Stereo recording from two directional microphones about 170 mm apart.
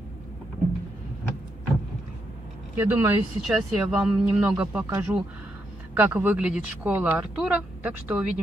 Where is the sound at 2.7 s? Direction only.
15° right (ahead or behind).